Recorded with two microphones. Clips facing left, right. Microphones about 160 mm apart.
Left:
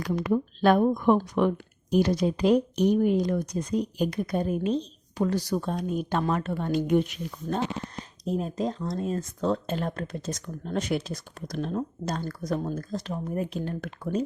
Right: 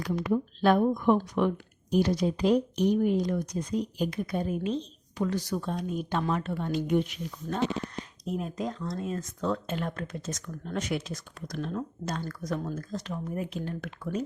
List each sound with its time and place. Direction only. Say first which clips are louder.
0.0 s speech: left 2 dB; 65° left (ahead or behind)
3.3 s speech: left 3 dB; 40° left (ahead or behind)
8.2 s speech: left 4 dB; 30° left (ahead or behind)